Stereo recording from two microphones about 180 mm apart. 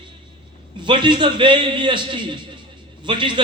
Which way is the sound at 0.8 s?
25° right (ahead or behind).